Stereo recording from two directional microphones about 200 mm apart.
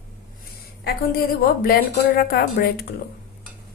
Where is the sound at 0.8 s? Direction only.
50° left (ahead or behind).